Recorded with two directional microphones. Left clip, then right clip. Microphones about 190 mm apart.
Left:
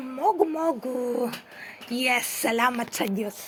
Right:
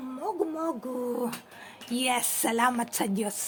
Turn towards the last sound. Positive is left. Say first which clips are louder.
# left 2 dB
turn(degrees=-10)  # may be behind; listen again after turning